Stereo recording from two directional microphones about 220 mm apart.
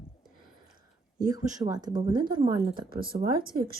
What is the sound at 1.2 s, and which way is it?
A woman's voice, 15° right (ahead or behind).